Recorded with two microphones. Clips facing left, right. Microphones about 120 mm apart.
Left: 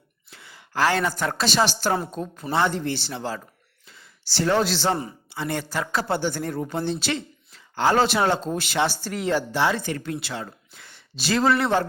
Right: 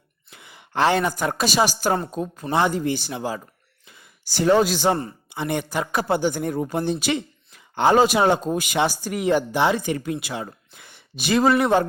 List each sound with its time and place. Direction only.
0.3 s a woman's voice: 20° right (ahead or behind)
3.8 s sigh: 15° right (ahead or behind)
5.3 s speech: 15° right (ahead or behind)